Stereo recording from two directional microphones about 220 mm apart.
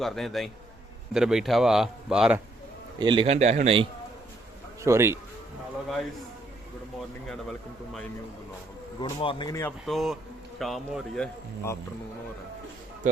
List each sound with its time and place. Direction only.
0.0 s speech: centre (ahead or behind)
3.0 s a man's voice: 20° right (ahead or behind)
4.8 s speech: 10° right (ahead or behind)
9.0 s speech: 20° left (ahead or behind)
9.8 s speech: centre (ahead or behind)